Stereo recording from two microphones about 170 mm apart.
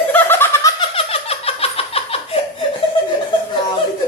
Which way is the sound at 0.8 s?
35° left (ahead or behind).